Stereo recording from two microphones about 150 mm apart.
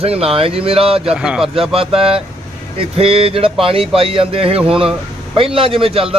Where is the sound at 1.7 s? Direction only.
40° right (ahead or behind).